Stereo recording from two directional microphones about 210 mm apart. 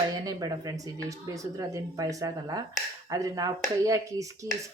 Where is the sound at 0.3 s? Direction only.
15° right (ahead or behind).